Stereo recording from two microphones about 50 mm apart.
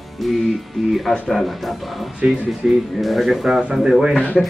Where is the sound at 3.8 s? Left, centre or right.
Centre.